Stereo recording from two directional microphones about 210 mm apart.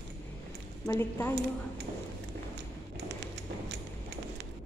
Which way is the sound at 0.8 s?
15° left (ahead or behind).